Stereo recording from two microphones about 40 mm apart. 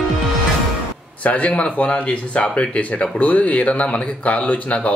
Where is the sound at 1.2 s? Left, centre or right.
Left.